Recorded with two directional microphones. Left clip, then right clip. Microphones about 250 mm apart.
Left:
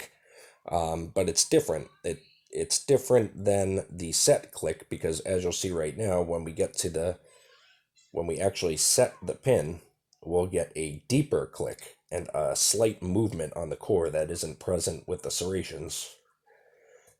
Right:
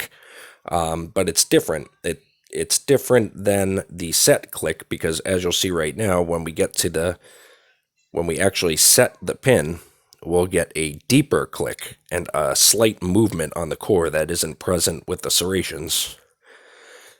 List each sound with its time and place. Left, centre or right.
0.0 s speech: right